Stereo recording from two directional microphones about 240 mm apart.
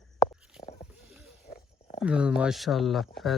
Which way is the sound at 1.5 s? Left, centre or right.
Left.